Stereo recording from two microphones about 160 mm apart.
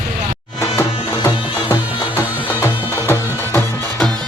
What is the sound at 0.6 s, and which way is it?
Music, 20° left (ahead or behind).